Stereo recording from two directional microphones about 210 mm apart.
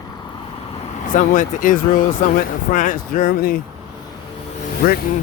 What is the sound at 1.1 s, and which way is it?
A man's voice, 40° left (ahead or behind).